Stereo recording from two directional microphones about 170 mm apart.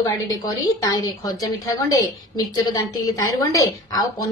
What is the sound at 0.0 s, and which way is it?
A woman's voice, 20° left (ahead or behind).